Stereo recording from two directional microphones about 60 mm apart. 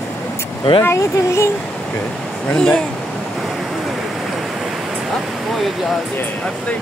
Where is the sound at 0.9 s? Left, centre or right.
Left.